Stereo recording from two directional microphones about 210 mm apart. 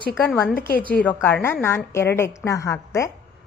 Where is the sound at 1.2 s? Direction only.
10° left (ahead or behind).